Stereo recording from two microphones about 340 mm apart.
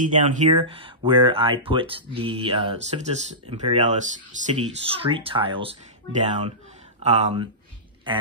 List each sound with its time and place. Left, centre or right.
0.0 s speech: right